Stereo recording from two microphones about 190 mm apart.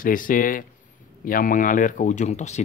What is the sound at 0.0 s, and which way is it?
Speech, 45° left (ahead or behind).